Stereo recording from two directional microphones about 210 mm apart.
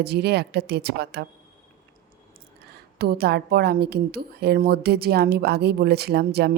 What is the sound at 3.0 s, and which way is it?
Speech, 50° right (ahead or behind).